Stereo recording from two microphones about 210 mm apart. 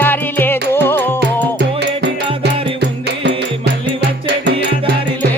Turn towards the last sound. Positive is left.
turn(degrees=-60)  # may be behind; listen again after turning